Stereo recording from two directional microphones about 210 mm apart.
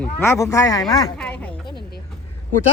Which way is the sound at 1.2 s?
5° left (ahead or behind).